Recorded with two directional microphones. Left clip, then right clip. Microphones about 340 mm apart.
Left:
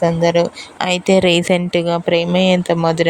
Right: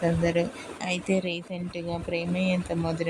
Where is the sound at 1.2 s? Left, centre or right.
Left.